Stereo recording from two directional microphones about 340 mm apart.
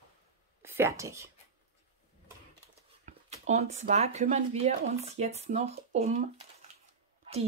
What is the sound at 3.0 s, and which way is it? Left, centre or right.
Speech, centre.